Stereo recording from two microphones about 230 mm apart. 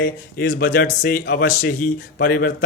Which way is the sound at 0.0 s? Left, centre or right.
Left.